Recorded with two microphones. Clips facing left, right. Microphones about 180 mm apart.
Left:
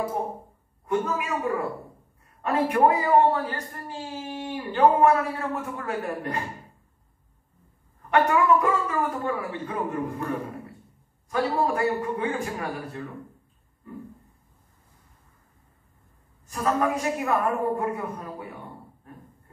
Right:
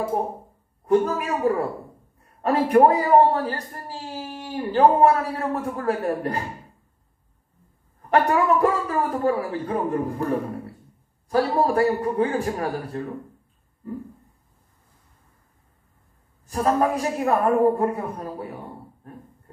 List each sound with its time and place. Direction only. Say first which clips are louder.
0.8 s a man's voice: right 6 dB; 35° right (ahead or behind)
8.1 s a man's voice: right 1 dB; 35° right (ahead or behind)
16.4 s a man's voice: right 4 dB; 35° right (ahead or behind)